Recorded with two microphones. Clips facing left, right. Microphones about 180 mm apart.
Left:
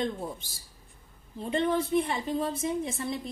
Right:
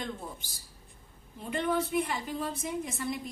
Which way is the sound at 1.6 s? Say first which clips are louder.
Left 2 dB; 25° left (ahead or behind).